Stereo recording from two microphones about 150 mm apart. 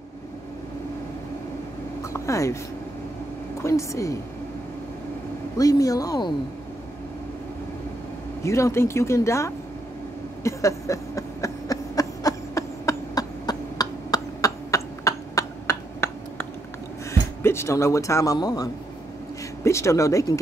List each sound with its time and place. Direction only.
2.1 s speech: 20° left (ahead or behind)
3.6 s speech: 20° left (ahead or behind)
5.6 s speech: 25° left (ahead or behind)
8.4 s speech: 20° left (ahead or behind)
10.4 s a sound: 20° left (ahead or behind)
17.1 s speech: 15° left (ahead or behind)